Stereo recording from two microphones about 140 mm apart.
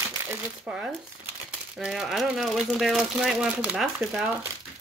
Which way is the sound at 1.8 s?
5° right (ahead or behind).